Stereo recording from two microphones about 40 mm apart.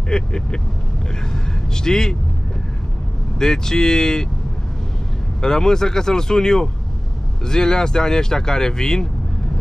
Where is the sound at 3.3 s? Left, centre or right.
Centre.